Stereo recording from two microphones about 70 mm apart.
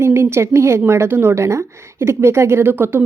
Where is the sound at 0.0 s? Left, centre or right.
Right.